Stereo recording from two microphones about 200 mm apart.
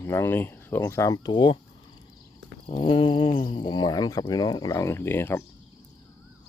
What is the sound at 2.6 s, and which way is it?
Speech, 25° left (ahead or behind).